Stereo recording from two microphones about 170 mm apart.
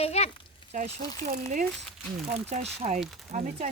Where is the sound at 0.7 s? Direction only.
50° right (ahead or behind).